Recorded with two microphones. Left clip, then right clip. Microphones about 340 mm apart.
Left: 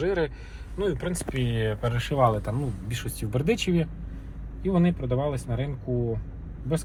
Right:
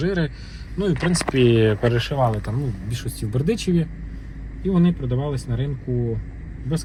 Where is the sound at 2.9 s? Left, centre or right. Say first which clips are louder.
Right 2 dB; centre.